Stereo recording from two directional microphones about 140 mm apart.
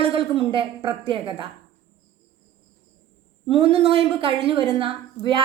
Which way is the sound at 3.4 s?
45° right (ahead or behind).